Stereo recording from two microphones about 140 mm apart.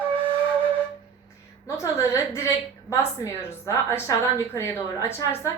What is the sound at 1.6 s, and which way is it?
A woman's voice, 20° left (ahead or behind).